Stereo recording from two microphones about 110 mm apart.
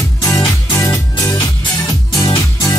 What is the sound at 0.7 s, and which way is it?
Music, 25° left (ahead or behind).